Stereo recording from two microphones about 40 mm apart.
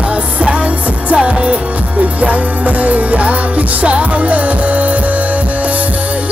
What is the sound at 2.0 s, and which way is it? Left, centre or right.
Music, right.